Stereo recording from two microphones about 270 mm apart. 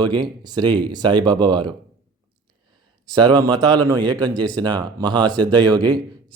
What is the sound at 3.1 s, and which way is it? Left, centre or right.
Speech, centre.